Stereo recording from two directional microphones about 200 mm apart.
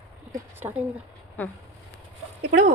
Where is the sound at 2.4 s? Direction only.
55° right (ahead or behind).